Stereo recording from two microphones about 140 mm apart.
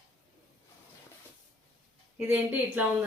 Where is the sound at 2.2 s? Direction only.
10° right (ahead or behind).